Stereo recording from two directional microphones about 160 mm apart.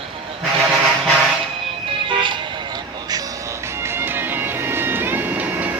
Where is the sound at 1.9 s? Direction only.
35° right (ahead or behind).